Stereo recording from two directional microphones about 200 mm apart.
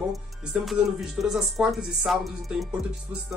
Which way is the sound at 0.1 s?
Centre (ahead or behind).